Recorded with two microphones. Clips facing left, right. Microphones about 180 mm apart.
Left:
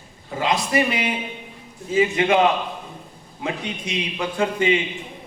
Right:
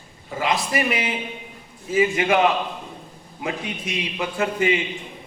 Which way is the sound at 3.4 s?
25° left (ahead or behind).